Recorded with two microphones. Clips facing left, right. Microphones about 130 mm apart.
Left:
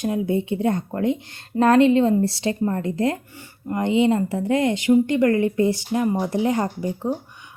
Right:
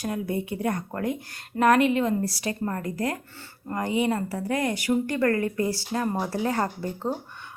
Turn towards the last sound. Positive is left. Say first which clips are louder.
# left 4 dB
turn(degrees=15)  # may be behind; listen again after turning